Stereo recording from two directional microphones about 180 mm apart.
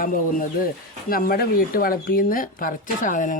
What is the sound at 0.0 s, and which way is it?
Speech, 50° left (ahead or behind).